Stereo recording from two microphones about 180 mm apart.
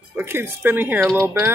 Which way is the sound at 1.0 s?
5° left (ahead or behind).